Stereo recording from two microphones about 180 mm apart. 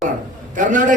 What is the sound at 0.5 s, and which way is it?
Speech, 45° right (ahead or behind).